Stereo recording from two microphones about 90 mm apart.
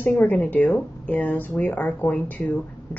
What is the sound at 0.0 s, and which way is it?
A woman's voice, 20° left (ahead or behind).